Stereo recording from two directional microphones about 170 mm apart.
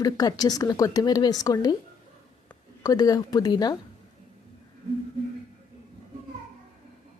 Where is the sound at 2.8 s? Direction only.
20° left (ahead or behind).